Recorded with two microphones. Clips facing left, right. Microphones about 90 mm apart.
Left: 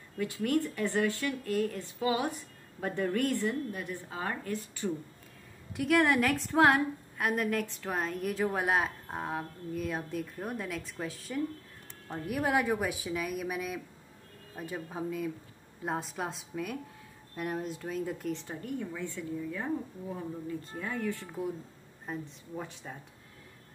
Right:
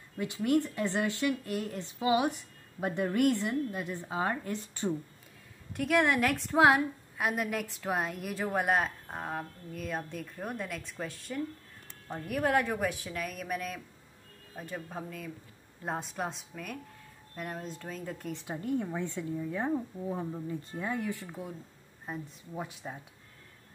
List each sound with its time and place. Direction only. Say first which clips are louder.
0.2 s a woman's voice: right 1 dB; 20° right (ahead or behind)
5.8 s a woman's voice: left 1 dB; centre (ahead or behind)
18.9 s a woman's voice: right 2 dB; 25° right (ahead or behind)
20.8 s speech: right 1 dB; 15° right (ahead or behind)
22.6 s speech: right 2 dB; 10° right (ahead or behind)